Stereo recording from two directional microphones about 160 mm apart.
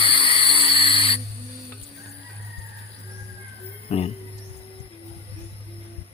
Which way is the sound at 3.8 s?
40° left (ahead or behind).